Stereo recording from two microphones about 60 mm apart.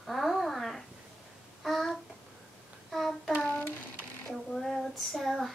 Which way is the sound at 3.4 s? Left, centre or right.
Left.